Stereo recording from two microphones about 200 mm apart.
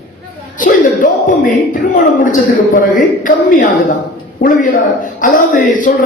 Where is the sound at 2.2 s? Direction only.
40° left (ahead or behind).